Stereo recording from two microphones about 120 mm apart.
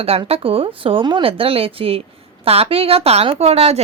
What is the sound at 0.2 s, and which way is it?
A woman's voice, 50° right (ahead or behind).